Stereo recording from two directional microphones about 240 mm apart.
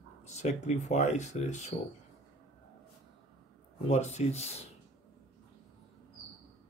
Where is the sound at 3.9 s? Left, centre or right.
Left.